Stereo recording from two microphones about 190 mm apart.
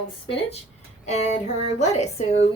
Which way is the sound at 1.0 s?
35° left (ahead or behind).